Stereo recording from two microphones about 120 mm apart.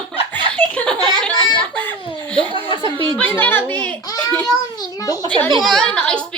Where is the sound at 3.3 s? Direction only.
15° left (ahead or behind).